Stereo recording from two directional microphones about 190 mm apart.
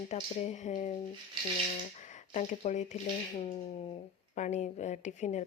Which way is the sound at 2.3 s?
40° left (ahead or behind).